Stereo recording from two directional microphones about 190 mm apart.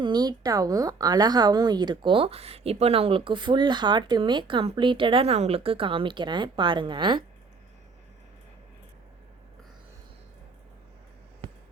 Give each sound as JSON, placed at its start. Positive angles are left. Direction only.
{"t": 0.0, "sound": "a woman's voice", "side_deg": -20}